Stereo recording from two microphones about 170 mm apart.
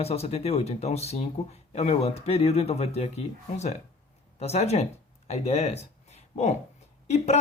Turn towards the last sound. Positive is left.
turn(degrees=40)  # may be behind; listen again after turning